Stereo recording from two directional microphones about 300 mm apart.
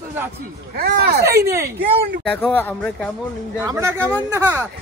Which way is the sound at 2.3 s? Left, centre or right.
Centre.